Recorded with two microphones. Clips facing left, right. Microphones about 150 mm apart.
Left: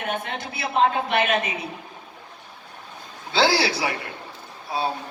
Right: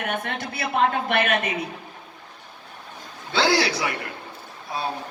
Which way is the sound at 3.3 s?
30° left (ahead or behind).